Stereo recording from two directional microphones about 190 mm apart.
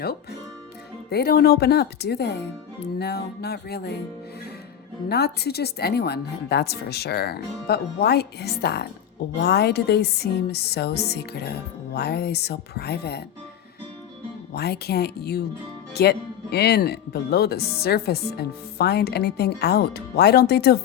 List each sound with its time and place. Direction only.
1.1 s speech: 55° left (ahead or behind)
5.0 s speech: 55° left (ahead or behind)
14.5 s speech: 55° left (ahead or behind)